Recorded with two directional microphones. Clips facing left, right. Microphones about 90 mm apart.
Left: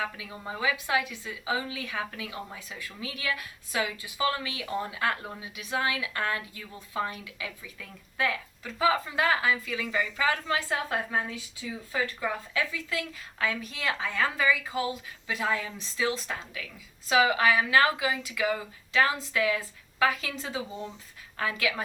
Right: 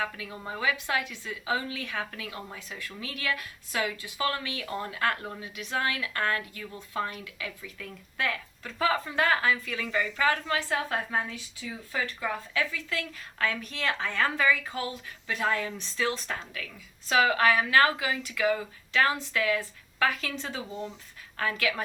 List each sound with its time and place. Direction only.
0.0 s a woman's voice: 15° left (ahead or behind)
13.4 s a woman's voice: 10° left (ahead or behind)
21.3 s a woman's voice: 15° left (ahead or behind)